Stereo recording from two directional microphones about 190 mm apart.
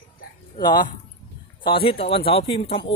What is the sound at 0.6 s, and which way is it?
Speech, 25° left (ahead or behind).